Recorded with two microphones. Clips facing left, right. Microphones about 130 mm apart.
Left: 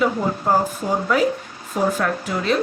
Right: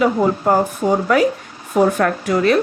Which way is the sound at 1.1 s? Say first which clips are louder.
Right 4 dB; 60° right (ahead or behind).